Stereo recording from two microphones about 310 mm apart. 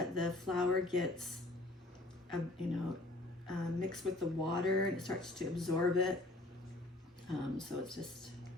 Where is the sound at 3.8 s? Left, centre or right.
Centre.